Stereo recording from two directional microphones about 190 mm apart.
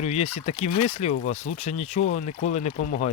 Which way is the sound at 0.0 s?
35° left (ahead or behind).